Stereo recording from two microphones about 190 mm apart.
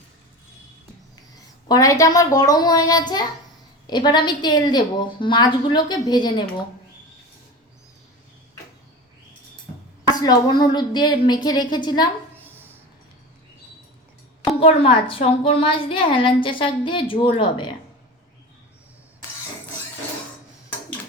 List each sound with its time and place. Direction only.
1.6 s a woman's voice: 20° left (ahead or behind)
10.1 s a woman's voice: 20° left (ahead or behind)
12.4 s a sound: 10° right (ahead or behind)
14.6 s a woman's voice: 30° left (ahead or behind)